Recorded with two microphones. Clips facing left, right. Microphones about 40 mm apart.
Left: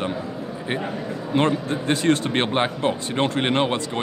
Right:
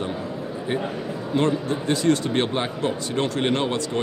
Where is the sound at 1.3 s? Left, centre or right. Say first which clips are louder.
Left 1 dB; left.